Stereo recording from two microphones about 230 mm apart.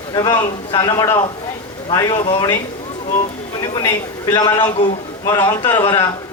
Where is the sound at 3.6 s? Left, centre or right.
Centre.